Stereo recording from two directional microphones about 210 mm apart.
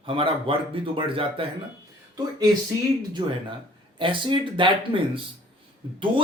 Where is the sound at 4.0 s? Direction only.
25° right (ahead or behind).